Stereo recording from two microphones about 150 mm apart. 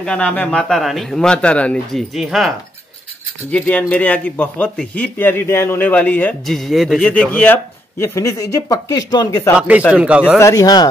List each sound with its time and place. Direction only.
0.0 s speech: 10° left (ahead or behind)
3.5 s speech: 10° left (ahead or behind)
7.1 s speech: 10° left (ahead or behind)
9.6 s speech: 10° right (ahead or behind)
10.4 s speech: 25° left (ahead or behind)